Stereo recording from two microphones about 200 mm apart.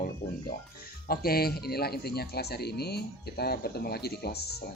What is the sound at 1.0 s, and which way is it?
Speech, 50° left (ahead or behind).